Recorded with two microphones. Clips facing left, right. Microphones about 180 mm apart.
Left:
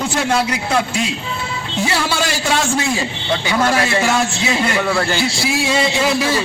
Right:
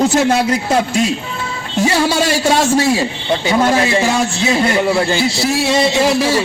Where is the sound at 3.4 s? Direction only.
25° right (ahead or behind).